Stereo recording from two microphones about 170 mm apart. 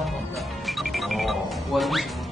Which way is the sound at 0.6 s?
Centre (ahead or behind).